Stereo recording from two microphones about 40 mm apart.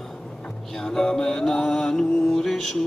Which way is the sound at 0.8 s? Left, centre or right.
Centre.